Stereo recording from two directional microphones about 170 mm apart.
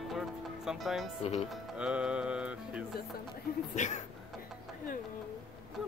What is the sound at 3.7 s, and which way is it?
Speech, 45° left (ahead or behind).